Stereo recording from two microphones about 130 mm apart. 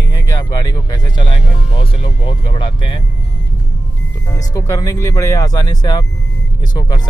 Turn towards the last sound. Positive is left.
turn(degrees=30)  # may be behind; listen again after turning